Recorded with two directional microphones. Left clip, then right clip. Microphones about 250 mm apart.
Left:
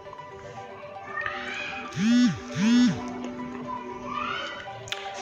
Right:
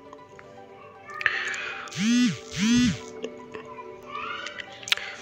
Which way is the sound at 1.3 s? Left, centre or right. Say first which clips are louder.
Right 10 dB; right.